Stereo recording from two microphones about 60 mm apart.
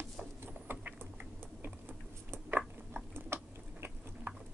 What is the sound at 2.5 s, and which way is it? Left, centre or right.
Biting, right.